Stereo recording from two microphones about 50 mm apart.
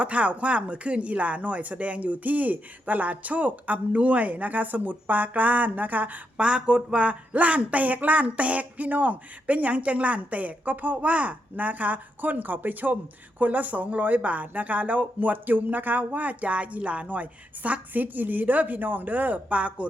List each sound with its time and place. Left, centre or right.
0.0 s speech: right
6.3 s speech: right